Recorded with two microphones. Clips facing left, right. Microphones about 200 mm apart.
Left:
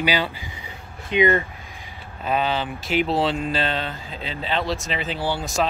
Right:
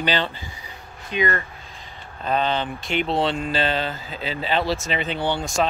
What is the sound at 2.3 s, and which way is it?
Speech, 5° left (ahead or behind).